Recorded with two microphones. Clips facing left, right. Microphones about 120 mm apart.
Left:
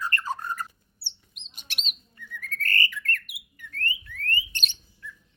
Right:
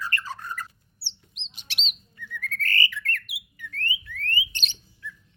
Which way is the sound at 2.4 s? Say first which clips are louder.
Right 1 dB; 45° left (ahead or behind).